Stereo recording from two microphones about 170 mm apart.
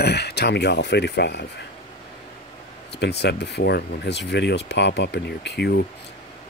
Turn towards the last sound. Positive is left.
turn(degrees=80)